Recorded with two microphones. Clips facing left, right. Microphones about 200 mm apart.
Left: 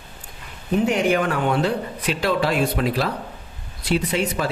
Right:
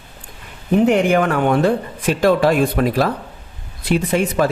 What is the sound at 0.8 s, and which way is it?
Speech, 60° right (ahead or behind).